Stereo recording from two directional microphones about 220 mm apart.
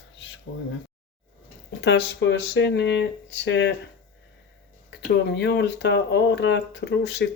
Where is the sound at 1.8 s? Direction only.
50° left (ahead or behind).